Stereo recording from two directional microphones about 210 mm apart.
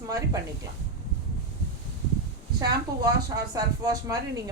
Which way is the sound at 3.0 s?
15° right (ahead or behind).